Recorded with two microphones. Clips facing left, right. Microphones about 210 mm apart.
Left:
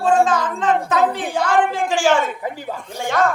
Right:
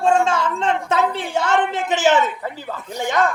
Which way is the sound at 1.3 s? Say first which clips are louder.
Left 1 dB; 25° right (ahead or behind).